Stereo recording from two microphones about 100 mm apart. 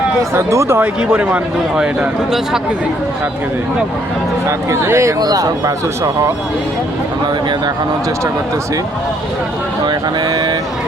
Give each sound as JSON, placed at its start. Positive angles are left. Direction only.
{"t": 0.2, "sound": "speech", "side_deg": -30}
{"t": 4.4, "sound": "speech", "side_deg": -30}
{"t": 9.8, "sound": "speech", "side_deg": -40}